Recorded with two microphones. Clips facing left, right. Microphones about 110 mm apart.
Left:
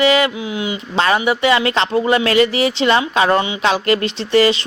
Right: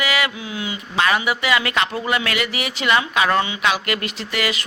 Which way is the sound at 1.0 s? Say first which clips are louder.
Left 4 dB; 30° left (ahead or behind).